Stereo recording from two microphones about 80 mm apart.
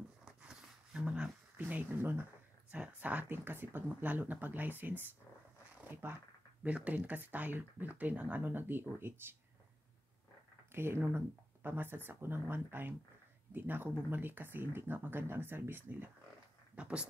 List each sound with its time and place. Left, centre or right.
0.2 s a sound: centre; by 2.2 s right
2.7 s speech: centre
10.7 s speech: right
16.7 s speech: centre